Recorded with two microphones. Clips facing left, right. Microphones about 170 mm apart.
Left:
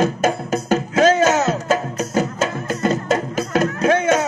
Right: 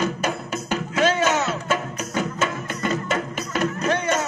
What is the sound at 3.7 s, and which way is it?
Music, 55° left (ahead or behind).